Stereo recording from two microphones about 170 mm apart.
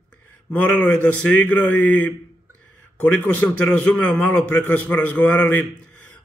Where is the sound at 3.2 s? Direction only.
10° left (ahead or behind).